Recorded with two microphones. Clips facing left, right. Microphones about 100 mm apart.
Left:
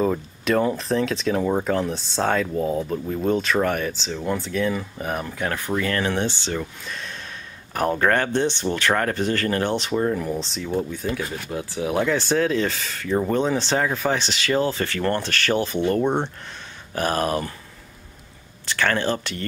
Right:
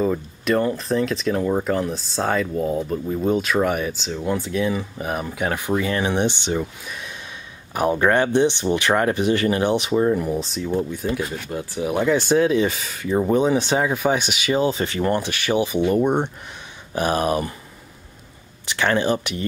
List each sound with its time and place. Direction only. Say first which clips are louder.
0.0 s speech: right 1 dB; centre (ahead or behind); by 17.6 s 15° right (ahead or behind)
18.7 s speech: right 2 dB; 15° right (ahead or behind)